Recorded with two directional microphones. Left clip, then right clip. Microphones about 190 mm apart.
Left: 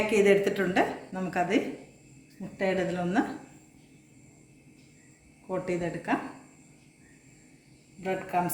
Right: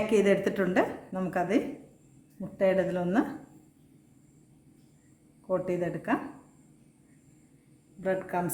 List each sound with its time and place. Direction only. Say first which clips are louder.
0.1 s a woman's voice: left 2 dB; 45° right (ahead or behind)
5.5 s a woman's voice: right 2 dB; 35° right (ahead or behind)
8.0 s a woman's voice: right 1 dB; 40° right (ahead or behind)